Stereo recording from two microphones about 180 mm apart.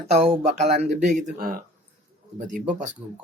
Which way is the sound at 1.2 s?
55° right (ahead or behind).